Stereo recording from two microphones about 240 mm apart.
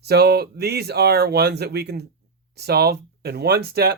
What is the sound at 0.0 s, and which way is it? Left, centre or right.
Speech, right.